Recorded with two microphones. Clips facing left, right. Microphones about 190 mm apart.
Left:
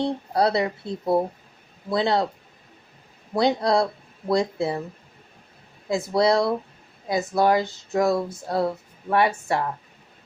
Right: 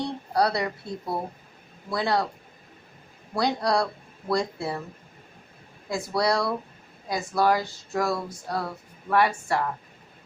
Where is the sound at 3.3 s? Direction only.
20° left (ahead or behind).